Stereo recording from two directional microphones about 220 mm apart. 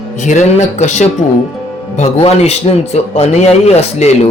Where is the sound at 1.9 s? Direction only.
30° left (ahead or behind).